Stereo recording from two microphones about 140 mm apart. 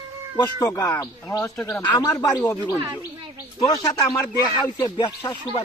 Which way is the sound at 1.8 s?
25° left (ahead or behind).